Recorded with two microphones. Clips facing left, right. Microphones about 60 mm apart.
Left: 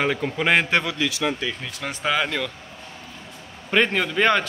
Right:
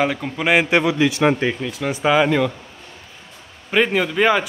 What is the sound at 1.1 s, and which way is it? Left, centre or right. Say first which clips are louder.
Speech: right 8 dB; right.